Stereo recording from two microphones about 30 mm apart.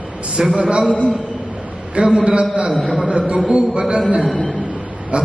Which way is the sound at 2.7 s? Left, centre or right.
Centre.